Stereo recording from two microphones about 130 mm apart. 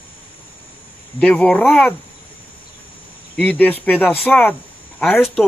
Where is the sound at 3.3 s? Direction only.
10° left (ahead or behind).